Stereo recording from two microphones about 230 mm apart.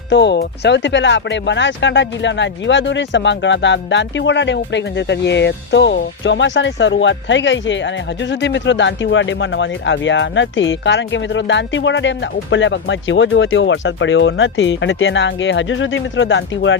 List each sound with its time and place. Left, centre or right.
0.1 s speech: left